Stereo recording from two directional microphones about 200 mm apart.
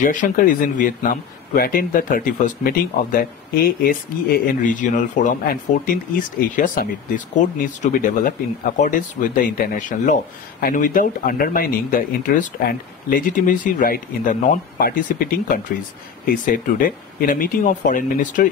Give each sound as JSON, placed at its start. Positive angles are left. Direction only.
{"t": 0.0, "sound": "speech", "side_deg": 40}